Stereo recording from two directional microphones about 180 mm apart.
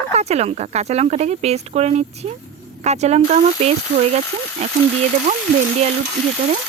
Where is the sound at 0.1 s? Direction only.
35° right (ahead or behind).